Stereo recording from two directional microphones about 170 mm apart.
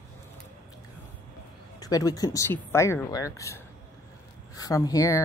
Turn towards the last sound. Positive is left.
turn(degrees=20)  # may be behind; listen again after turning